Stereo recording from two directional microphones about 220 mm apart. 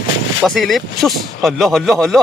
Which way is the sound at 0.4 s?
Centre (ahead or behind).